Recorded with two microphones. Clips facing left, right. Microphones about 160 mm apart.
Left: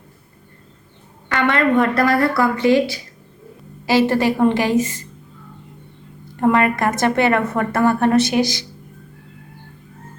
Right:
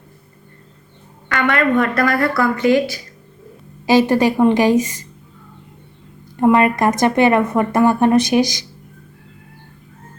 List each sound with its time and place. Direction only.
1.3 s a woman's voice: 25° left (ahead or behind)
3.8 s a woman's voice: 15° right (ahead or behind)
6.4 s a woman's voice: 20° right (ahead or behind)